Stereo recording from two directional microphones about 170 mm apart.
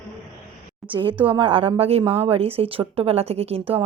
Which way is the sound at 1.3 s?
30° right (ahead or behind).